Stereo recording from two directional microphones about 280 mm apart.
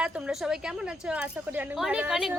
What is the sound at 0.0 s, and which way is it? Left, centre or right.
A woman's voice, centre.